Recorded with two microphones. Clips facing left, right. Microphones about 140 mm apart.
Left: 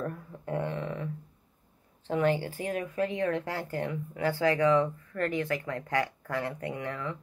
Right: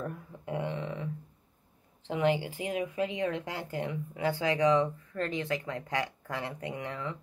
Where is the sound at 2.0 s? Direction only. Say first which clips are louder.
Left 1 dB; 15° right (ahead or behind).